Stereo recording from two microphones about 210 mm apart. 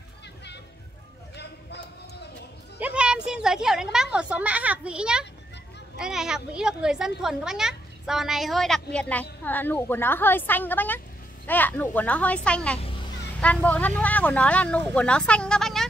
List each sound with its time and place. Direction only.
1.3 s a sound: 55° left (ahead or behind)
2.8 s speech: 5° right (ahead or behind)
12.7 s children playing: 25° left (ahead or behind)
13.4 s speech: 5° left (ahead or behind)